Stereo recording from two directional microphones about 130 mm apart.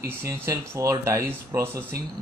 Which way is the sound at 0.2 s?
20° right (ahead or behind).